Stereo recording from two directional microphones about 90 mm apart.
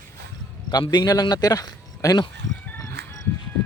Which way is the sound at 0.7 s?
50° left (ahead or behind).